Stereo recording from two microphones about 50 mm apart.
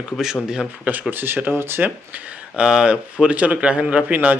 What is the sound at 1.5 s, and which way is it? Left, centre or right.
Speech, right.